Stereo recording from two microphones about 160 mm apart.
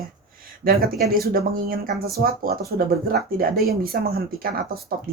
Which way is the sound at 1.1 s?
70° right (ahead or behind).